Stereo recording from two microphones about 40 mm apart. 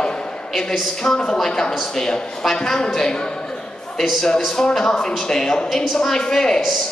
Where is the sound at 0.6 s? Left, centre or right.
Centre.